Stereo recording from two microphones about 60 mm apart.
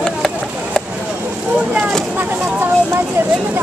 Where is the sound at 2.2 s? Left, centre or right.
Right.